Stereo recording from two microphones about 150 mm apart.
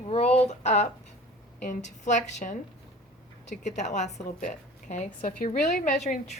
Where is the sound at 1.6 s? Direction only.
55° left (ahead or behind).